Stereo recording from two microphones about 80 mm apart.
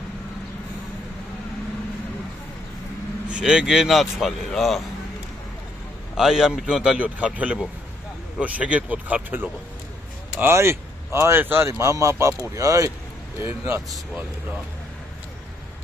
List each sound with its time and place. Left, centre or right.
3.3 s speech: centre
6.1 s a man's voice: centre; by 12.9 s right
13.4 s speech: right